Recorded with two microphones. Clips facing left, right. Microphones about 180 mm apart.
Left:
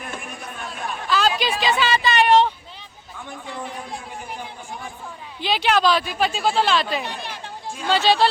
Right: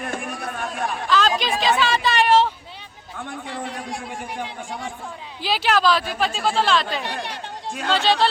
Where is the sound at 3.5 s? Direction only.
70° right (ahead or behind).